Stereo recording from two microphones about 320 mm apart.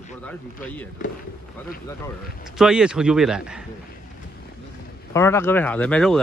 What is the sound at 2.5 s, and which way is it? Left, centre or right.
Speech, centre.